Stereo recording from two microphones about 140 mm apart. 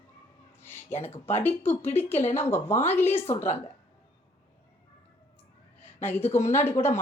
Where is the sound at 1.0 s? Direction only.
15° left (ahead or behind).